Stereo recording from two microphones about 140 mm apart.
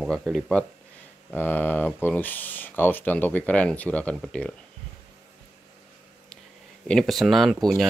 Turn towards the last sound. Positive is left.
turn(degrees=0)  # may be behind; listen again after turning